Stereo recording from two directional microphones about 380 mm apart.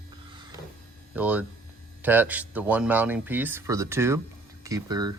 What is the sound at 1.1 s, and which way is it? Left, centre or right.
Speech, centre.